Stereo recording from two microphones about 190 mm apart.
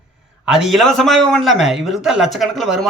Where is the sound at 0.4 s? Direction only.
Centre (ahead or behind).